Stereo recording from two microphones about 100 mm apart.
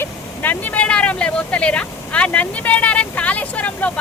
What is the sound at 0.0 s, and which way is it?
Speech, 15° left (ahead or behind).